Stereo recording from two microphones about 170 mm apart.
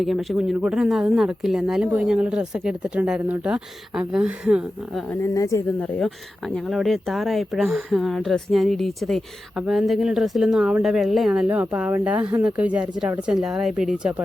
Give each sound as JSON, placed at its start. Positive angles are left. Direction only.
{"t": 0.0, "sound": "speech", "side_deg": 0}
{"t": 5.2, "sound": "speech", "side_deg": 20}
{"t": 6.5, "sound": "speech", "side_deg": 0}